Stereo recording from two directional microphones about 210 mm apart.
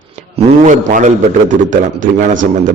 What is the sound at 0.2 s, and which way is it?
A man's voice, 35° right (ahead or behind).